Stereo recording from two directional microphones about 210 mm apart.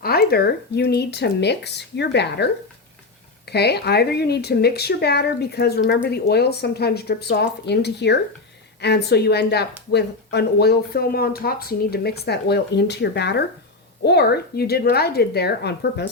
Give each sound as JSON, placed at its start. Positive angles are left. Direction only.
{"t": 0.0, "sound": "speech", "side_deg": 45}